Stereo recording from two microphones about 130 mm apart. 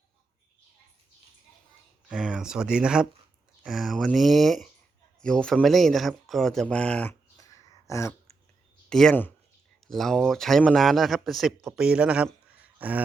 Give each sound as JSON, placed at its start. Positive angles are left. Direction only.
{"t": 2.0, "sound": "speech", "side_deg": -5}
{"t": 7.1, "sound": "a sound", "side_deg": 25}
{"t": 8.9, "sound": "speech", "side_deg": 5}